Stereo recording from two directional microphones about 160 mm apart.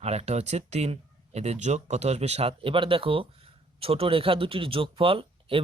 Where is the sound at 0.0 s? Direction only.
40° right (ahead or behind).